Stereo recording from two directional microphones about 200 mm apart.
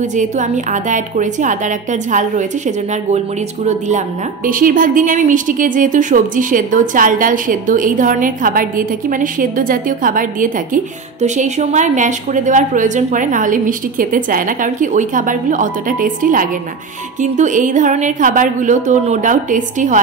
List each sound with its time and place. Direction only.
0.1 s a woman's voice: 40° right (ahead or behind)
4.5 s a woman's voice: 45° right (ahead or behind)